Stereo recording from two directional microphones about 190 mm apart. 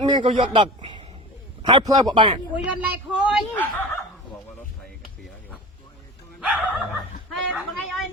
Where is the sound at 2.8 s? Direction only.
5° right (ahead or behind).